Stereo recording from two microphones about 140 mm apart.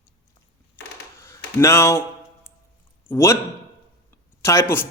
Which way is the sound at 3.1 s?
20° left (ahead or behind).